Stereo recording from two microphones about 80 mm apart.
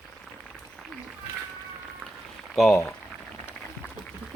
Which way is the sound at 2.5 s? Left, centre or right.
Centre.